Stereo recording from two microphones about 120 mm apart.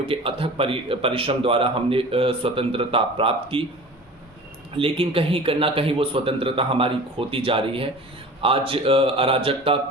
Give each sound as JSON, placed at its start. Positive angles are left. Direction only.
{"t": 0.0, "sound": "speech", "side_deg": -50}
{"t": 4.7, "sound": "speech", "side_deg": -50}